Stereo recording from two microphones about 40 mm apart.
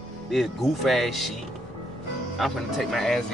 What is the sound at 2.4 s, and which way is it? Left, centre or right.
Speech, centre.